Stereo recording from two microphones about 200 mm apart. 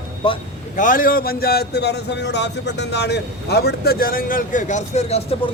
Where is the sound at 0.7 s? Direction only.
40° left (ahead or behind).